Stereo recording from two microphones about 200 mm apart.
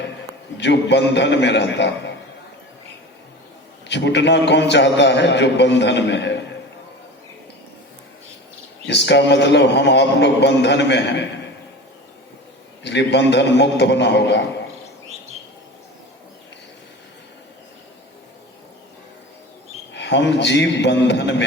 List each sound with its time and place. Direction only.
0.5 s a man's voice: 60° left (ahead or behind)
3.8 s a man's voice: 60° left (ahead or behind)
8.9 s a man's voice: 60° left (ahead or behind)
12.8 s a man's voice: 60° left (ahead or behind)
19.9 s a man's voice: 60° left (ahead or behind)